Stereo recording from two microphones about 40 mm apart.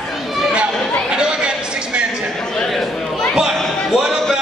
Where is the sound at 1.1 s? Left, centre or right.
Right.